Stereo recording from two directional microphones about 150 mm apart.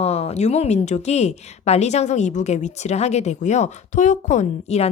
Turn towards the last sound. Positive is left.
turn(degrees=50)  # may be behind; listen again after turning